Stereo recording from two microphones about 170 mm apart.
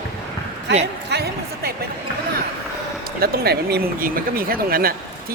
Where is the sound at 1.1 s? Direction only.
70° right (ahead or behind).